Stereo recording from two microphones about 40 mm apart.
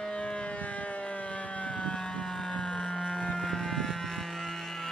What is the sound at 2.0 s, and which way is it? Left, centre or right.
Siren, centre.